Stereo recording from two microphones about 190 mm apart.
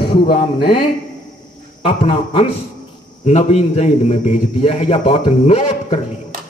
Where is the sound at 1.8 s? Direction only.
30° left (ahead or behind).